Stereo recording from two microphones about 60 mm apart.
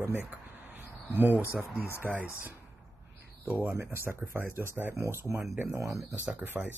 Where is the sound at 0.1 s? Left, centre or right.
Right.